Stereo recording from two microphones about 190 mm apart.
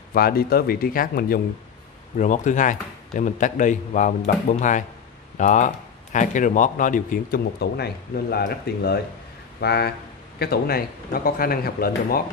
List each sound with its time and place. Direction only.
0.1 s speech: 50° left (ahead or behind)